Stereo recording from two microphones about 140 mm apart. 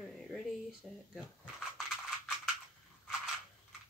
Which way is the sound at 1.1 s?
5° right (ahead or behind).